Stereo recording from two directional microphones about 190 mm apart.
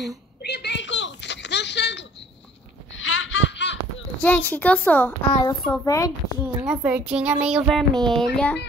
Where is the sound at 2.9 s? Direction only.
90° left; by 3.7 s 70° left (ahead or behind).